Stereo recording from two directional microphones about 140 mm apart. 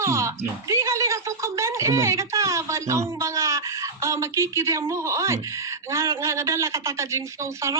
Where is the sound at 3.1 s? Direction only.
20° right (ahead or behind).